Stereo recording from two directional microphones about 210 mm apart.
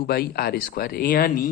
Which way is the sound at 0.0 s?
45° left (ahead or behind).